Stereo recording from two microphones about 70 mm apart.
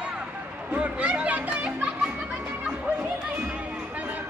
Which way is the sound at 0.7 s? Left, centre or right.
Centre.